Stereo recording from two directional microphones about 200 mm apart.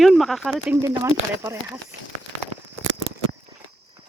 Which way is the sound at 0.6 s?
10° right (ahead or behind).